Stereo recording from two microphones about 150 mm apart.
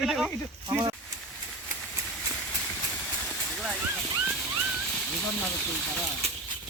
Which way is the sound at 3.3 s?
Centre (ahead or behind).